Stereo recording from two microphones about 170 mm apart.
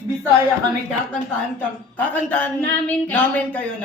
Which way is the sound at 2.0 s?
10° left (ahead or behind).